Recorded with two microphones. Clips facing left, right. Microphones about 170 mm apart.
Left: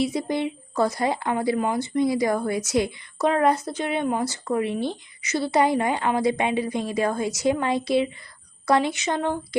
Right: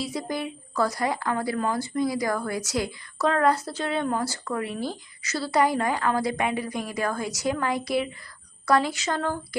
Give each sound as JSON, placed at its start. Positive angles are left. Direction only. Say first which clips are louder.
{"t": 0.0, "sound": "a woman's voice", "louder": "left 6 dB", "side_deg": 25}